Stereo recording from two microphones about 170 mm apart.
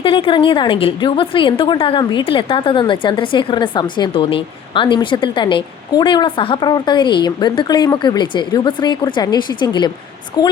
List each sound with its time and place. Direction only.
0.0 s a woman's voice: 30° left (ahead or behind)